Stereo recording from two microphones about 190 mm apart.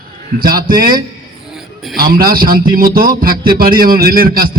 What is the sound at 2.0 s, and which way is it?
A man's voice, 50° right (ahead or behind).